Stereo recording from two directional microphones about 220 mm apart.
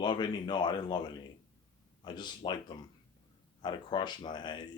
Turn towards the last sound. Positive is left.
turn(degrees=20)  # may be behind; listen again after turning